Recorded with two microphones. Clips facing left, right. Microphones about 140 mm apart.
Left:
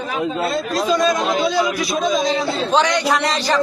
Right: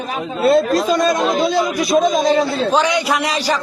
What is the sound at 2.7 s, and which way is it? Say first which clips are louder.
Speech: right 1 dB; 5° right (ahead or behind).